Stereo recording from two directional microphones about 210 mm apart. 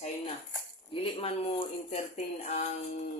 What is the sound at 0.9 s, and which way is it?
Speech, 25° left (ahead or behind).